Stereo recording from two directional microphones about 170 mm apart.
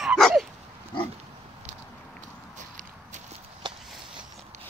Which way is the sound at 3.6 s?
30° right (ahead or behind).